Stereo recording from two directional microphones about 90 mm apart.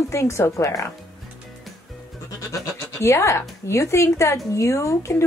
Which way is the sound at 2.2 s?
35° left (ahead or behind).